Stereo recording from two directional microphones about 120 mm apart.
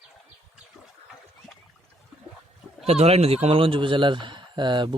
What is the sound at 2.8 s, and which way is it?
Speech, 60° right (ahead or behind).